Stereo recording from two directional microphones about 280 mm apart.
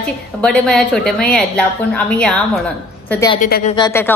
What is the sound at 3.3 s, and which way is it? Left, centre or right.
Speech, left.